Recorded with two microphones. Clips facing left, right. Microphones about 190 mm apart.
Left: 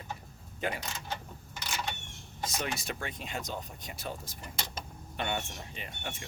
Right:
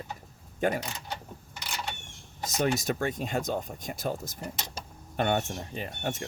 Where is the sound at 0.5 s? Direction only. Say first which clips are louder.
Right 7 dB; 45° right (ahead or behind).